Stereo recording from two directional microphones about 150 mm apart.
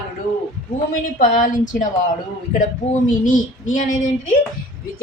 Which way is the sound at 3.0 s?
60° left (ahead or behind).